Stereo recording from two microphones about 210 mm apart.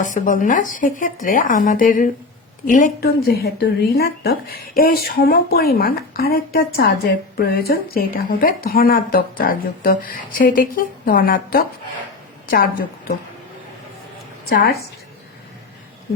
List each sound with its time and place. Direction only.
0.0 s a woman's voice: 40° left (ahead or behind)
14.5 s a woman's voice: 45° left (ahead or behind)